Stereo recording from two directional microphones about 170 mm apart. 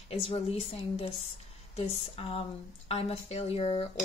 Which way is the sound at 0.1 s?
35° left (ahead or behind).